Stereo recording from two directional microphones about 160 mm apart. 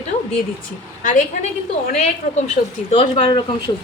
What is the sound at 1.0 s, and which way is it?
A woman's voice, 55° left (ahead or behind).